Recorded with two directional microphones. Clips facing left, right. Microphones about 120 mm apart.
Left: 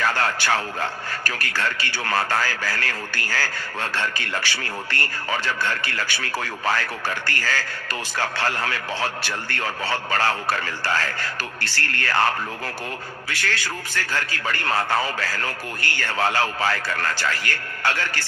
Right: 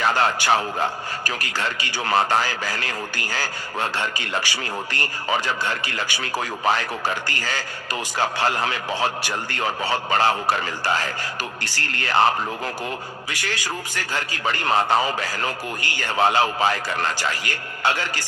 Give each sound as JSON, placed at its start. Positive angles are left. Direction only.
{"t": 0.0, "sound": "a man's voice", "side_deg": -20}
{"t": 13.3, "sound": "a man's voice", "side_deg": -15}